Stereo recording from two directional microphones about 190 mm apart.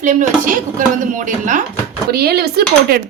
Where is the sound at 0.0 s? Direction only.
40° right (ahead or behind).